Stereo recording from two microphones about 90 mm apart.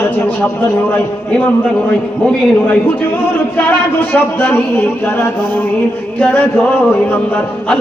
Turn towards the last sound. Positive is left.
turn(degrees=15)  # may be behind; listen again after turning